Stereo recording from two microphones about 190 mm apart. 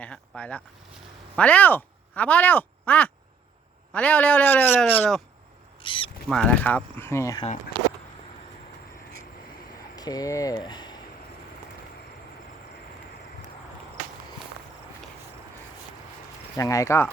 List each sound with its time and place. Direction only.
0.0 s a sound: 5° left (ahead or behind)
1.4 s speech: 5° left (ahead or behind)
5.8 s a sound: 25° left (ahead or behind)
6.2 s speech: 5° left (ahead or behind)
9.9 s speech: 20° left (ahead or behind)
16.6 s speech: 15° left (ahead or behind)